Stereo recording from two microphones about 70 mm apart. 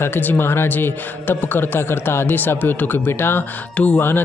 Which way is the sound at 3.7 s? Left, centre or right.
Centre.